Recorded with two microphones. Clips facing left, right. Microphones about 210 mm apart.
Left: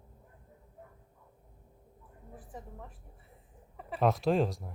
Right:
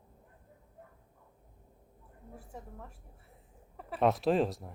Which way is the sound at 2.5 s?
Centre (ahead or behind).